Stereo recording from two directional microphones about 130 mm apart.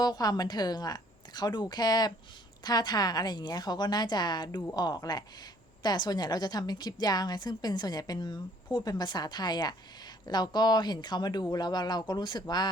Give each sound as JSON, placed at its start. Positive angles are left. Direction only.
{"t": 0.0, "sound": "a woman's voice", "side_deg": 30}